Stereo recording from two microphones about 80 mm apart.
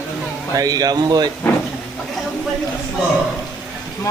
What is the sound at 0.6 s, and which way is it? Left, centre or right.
Speech, right.